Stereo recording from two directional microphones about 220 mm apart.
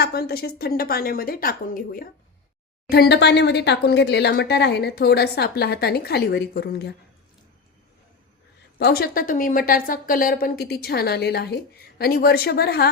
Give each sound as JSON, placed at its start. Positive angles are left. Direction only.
{"t": 0.0, "sound": "a woman's voice", "side_deg": 45}
{"t": 8.8, "sound": "a woman's voice", "side_deg": 45}